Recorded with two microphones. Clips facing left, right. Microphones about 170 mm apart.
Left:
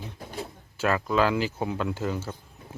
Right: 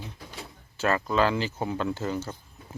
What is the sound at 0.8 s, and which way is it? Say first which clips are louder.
Speech: even; 5° left (ahead or behind).